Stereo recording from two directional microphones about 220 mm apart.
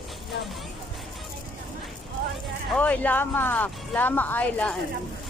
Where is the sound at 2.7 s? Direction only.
5° left (ahead or behind).